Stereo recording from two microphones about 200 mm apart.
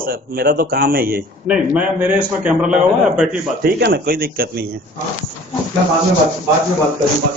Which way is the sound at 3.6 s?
50° right (ahead or behind).